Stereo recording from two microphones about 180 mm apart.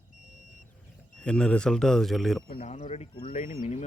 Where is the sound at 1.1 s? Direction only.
5° left (ahead or behind).